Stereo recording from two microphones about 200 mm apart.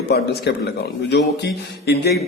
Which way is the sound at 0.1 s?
55° left (ahead or behind).